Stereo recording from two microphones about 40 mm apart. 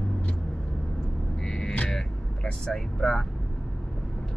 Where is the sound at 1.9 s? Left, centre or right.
Centre.